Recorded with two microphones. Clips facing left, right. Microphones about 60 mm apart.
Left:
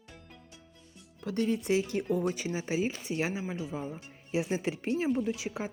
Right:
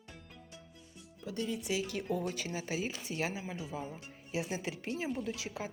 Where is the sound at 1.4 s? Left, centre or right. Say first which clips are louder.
Left 8 dB; left.